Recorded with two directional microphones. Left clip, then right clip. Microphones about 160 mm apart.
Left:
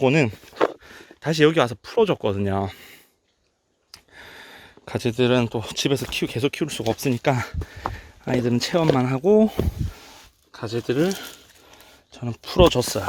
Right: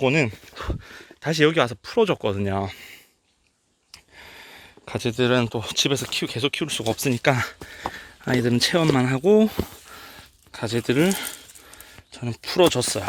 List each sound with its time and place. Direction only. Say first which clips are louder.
0.0 s speech: left 1 dB; 40° left (ahead or behind)
0.5 s speech: left 11 dB; 20° left (ahead or behind); by 6.8 s 35° left (ahead or behind)
6.8 s speech: even; 15° left (ahead or behind)
8.2 s speech: right 2 dB; centre (ahead or behind)
10.5 s speech: right 2 dB; 30° right (ahead or behind)
12.1 s speech: left 1 dB; centre (ahead or behind); by 13.1 s 25° left (ahead or behind)